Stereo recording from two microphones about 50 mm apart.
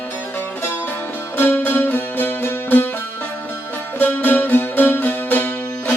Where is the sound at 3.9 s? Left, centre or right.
Left.